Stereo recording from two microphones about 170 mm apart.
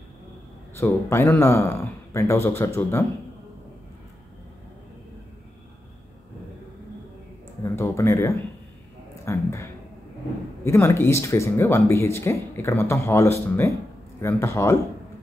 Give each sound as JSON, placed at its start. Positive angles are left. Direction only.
{"t": 0.7, "sound": "speech", "side_deg": 15}
{"t": 7.6, "sound": "speech", "side_deg": 15}